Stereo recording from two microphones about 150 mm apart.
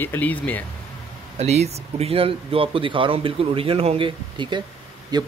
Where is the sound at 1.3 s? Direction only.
45° right (ahead or behind).